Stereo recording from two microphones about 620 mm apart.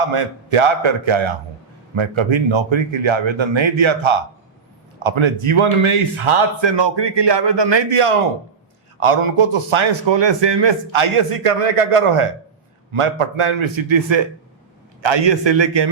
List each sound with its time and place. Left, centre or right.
0.0 s a man's voice: right